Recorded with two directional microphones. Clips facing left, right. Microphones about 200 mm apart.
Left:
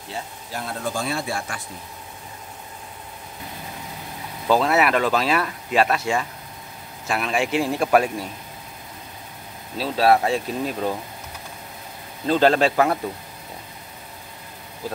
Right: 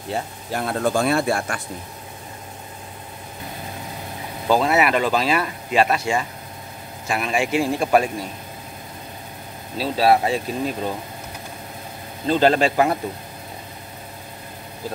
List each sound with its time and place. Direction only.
0.1 s speech: 60° right (ahead or behind)
4.5 s speech: centre (ahead or behind)
9.8 s speech: 5° right (ahead or behind)
12.3 s speech: centre (ahead or behind)